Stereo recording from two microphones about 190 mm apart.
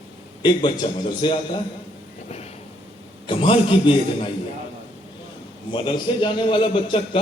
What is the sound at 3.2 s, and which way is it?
A man's voice, 25° left (ahead or behind).